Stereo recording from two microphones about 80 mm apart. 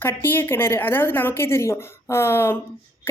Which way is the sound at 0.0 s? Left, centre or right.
Left.